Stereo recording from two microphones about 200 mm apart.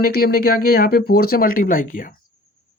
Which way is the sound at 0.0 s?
50° left (ahead or behind).